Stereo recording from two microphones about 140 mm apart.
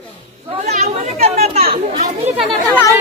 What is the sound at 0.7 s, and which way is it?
Speech, 50° right (ahead or behind).